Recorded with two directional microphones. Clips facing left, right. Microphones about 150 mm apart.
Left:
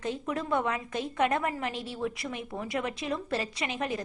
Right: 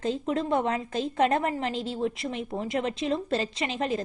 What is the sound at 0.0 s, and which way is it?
Speech, 30° right (ahead or behind).